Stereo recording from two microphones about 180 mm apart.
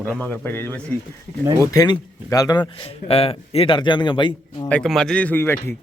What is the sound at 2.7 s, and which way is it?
Speech, 30° left (ahead or behind).